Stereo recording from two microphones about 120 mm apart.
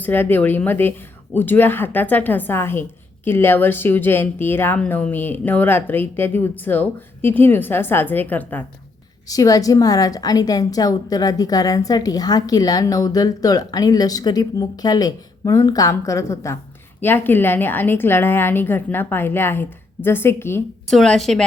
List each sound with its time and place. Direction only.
0.0 s a woman's voice: 15° left (ahead or behind)
9.2 s a woman's voice: 30° left (ahead or behind)
20.8 s a woman's voice: 5° left (ahead or behind)